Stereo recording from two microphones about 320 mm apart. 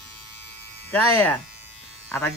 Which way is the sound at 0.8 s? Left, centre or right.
Centre.